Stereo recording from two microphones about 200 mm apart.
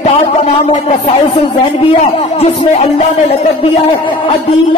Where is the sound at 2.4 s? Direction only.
30° left (ahead or behind).